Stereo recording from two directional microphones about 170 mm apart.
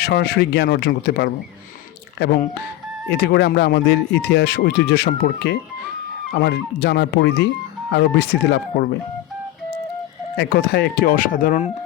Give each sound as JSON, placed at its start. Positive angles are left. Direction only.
{"t": 0.0, "sound": "speech", "side_deg": 75}
{"t": 2.1, "sound": "speech", "side_deg": 90}
{"t": 6.3, "sound": "speech", "side_deg": 75}
{"t": 10.3, "sound": "speech", "side_deg": 75}